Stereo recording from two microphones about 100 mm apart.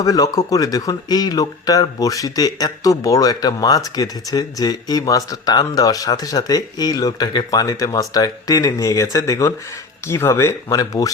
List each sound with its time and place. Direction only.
0.0 s speech: 35° left (ahead or behind)